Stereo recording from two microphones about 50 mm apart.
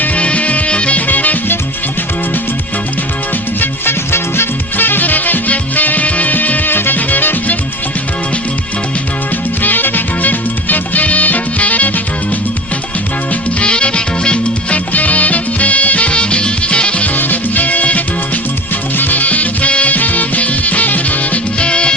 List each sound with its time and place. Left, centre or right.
0.0 s music: left
3.6 s music: left
9.6 s music: left
13.6 s music: left
17.2 s music: left